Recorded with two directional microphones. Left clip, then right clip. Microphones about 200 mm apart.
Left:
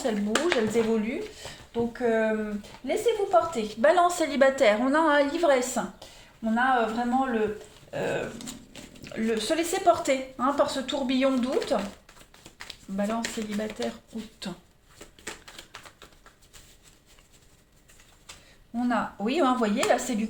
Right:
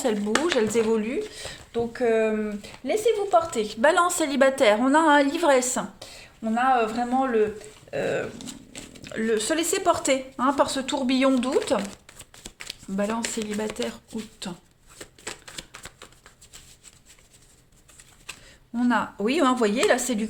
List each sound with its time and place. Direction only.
0.0 s speech: 40° right (ahead or behind)
8.7 s speech: 40° right (ahead or behind)
14.4 s speech: 25° right (ahead or behind)
18.8 s speech: 40° right (ahead or behind)